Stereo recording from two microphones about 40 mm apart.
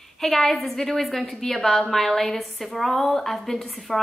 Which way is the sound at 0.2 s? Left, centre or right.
Centre.